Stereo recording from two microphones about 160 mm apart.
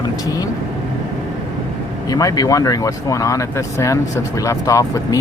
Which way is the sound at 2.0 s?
25° left (ahead or behind).